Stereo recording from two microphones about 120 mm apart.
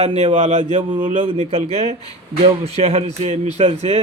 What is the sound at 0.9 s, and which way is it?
Speech, 45° right (ahead or behind).